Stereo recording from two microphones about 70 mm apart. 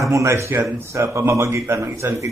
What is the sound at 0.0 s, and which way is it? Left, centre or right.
A man's voice, right.